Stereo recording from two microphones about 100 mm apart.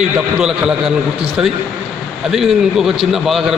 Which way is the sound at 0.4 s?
5° right (ahead or behind).